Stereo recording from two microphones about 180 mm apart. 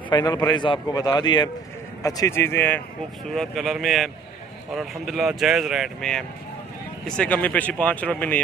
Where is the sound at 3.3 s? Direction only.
Centre (ahead or behind).